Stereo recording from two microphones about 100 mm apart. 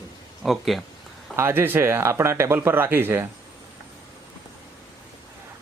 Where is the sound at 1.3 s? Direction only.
25° right (ahead or behind).